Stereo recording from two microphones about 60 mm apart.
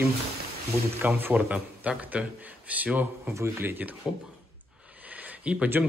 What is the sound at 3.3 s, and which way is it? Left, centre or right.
Speech, right.